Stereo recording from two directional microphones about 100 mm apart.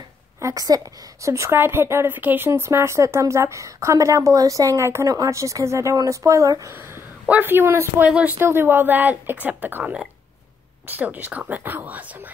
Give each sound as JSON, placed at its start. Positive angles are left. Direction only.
{"t": 0.4, "sound": "a woman's voice", "side_deg": -35}